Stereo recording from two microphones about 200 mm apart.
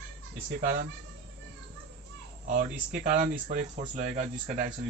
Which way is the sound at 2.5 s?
40° right (ahead or behind).